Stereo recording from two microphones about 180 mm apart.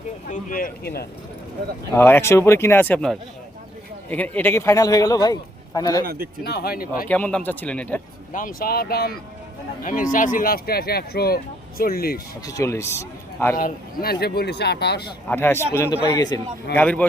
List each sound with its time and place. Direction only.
0.3 s speech: 50° left (ahead or behind)
1.9 s a man's voice: 15° left (ahead or behind)
6.4 s speech: 60° left (ahead or behind)
7.1 s speech: 5° left (ahead or behind)
8.3 s speech: 50° left (ahead or behind)
12.5 s speech: 15° left (ahead or behind)
13.6 s speech: 50° left (ahead or behind)
15.3 s a man's voice: 10° left (ahead or behind)
16.7 s speech: 10° left (ahead or behind)